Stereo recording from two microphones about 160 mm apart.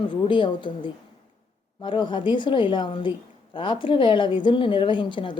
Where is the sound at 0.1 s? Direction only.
30° left (ahead or behind).